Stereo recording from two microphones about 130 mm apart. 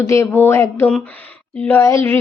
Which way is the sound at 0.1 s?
20° left (ahead or behind).